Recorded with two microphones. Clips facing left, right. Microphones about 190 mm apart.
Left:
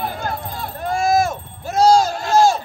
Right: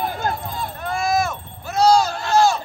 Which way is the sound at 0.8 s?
45° left (ahead or behind).